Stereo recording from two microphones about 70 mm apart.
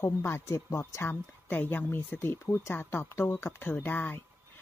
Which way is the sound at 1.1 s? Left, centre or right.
Left.